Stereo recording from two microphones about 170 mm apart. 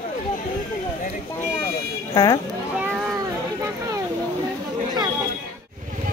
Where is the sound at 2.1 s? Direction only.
20° left (ahead or behind).